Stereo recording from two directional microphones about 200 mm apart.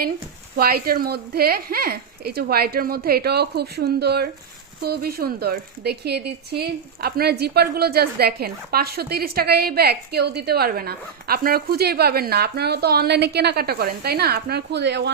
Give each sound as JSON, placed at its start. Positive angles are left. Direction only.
{"t": 0.5, "sound": "speech", "side_deg": -50}